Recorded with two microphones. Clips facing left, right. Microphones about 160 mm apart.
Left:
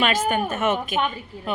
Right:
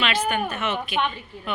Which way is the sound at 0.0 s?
45° left (ahead or behind).